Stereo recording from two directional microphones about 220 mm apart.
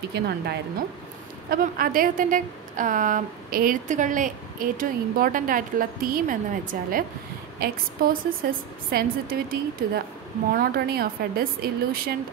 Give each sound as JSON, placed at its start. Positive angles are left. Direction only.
{"t": 0.1, "sound": "a woman's voice", "side_deg": -50}